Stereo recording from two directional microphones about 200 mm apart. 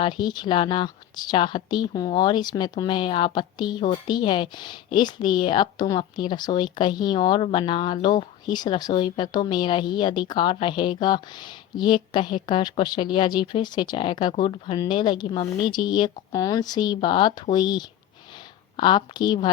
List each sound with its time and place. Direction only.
0.0 s a woman's voice: 20° left (ahead or behind)